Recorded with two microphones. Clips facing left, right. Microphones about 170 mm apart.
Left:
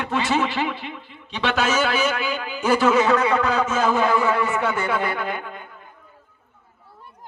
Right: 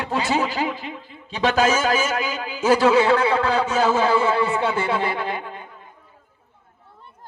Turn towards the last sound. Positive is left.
turn(degrees=-30)  # may be behind; listen again after turning